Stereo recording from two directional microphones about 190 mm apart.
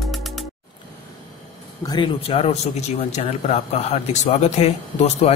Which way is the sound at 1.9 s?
25° left (ahead or behind).